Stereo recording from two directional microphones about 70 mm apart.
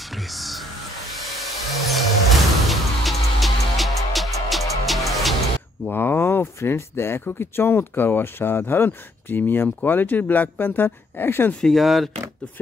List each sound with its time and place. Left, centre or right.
0.1 s music: centre
5.9 s speech: left
11.6 s speech: centre